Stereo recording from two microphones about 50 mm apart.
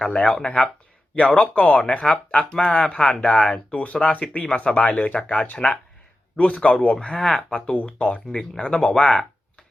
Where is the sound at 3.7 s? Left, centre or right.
Left.